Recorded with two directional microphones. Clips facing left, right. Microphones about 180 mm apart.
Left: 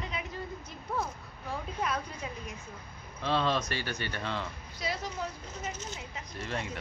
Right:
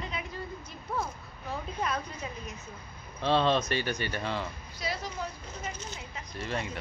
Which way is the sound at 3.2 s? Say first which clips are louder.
Right 4 dB; 30° right (ahead or behind).